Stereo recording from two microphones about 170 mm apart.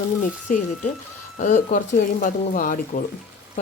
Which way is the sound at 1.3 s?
50° left (ahead or behind).